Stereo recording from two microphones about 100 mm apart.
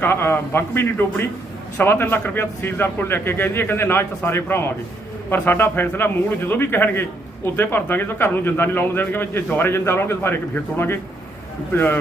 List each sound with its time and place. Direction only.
0.0 s speech: 25° left (ahead or behind)